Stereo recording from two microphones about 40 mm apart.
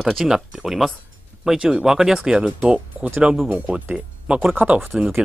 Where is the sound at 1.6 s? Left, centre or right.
Right.